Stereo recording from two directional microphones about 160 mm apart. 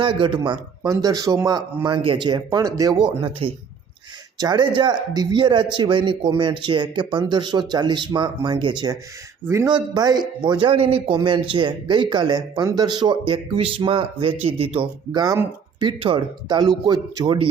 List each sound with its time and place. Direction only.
0.0 s speech: 30° right (ahead or behind)
3.2 s speech: 35° right (ahead or behind)